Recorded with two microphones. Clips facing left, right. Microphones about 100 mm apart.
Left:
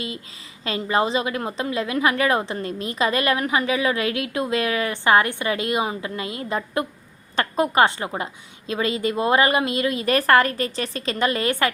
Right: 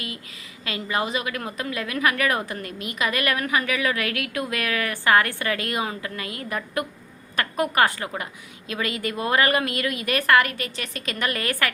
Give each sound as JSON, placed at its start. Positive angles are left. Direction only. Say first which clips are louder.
{"t": 0.6, "sound": "a woman's voice", "louder": "left 5 dB", "side_deg": 30}